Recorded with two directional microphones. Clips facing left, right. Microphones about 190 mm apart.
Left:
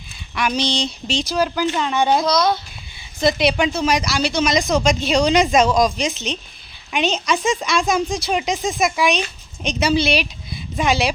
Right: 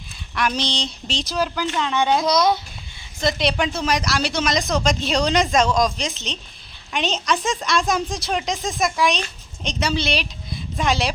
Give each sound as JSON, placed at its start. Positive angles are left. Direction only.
{"t": 0.3, "sound": "speech", "side_deg": 0}
{"t": 1.6, "sound": "speech", "side_deg": 15}
{"t": 1.9, "sound": "speech", "side_deg": 5}
{"t": 2.2, "sound": "a child's voice", "side_deg": -20}
{"t": 3.2, "sound": "a woman's voice", "side_deg": 5}